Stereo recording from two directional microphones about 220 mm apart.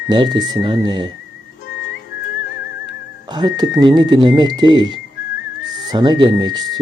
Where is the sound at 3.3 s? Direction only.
20° right (ahead or behind).